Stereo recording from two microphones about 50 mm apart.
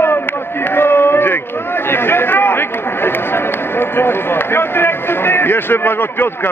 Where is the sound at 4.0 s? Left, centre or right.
Left.